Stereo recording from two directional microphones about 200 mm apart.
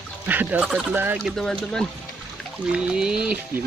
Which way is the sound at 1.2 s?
5° left (ahead or behind).